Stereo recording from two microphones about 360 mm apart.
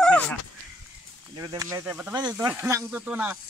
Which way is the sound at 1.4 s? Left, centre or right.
Centre.